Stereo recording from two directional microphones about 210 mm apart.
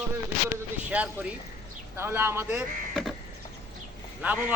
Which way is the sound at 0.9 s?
5° right (ahead or behind).